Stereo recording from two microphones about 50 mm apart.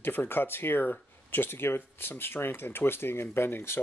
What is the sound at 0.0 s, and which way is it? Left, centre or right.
Speech, left.